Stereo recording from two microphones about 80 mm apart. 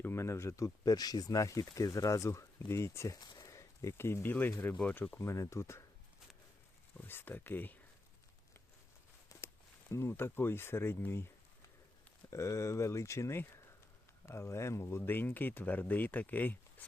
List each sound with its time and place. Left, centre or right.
0.0 s speech: left
3.2 s speech: left
7.1 s speech: left
9.3 s walk: left
9.9 s speech: left
12.3 s speech: left